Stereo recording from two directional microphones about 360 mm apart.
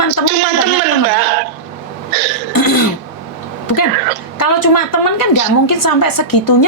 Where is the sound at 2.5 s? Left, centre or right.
Left.